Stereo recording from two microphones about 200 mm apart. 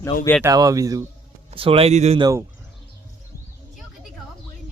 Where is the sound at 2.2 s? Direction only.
15° right (ahead or behind).